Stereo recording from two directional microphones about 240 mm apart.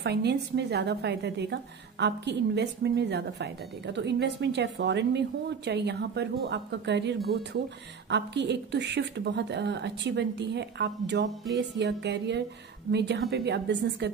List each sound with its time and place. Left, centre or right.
0.0 s a woman's voice: right